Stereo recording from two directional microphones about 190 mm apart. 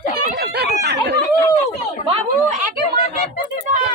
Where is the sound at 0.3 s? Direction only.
60° right (ahead or behind).